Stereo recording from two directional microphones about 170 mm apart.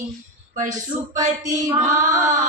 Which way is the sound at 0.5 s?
45° right (ahead or behind).